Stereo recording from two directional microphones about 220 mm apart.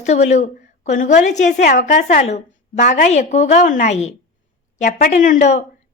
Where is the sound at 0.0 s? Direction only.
30° left (ahead or behind).